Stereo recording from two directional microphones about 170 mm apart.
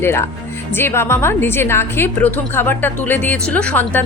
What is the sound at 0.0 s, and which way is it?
A woman's voice, 15° left (ahead or behind).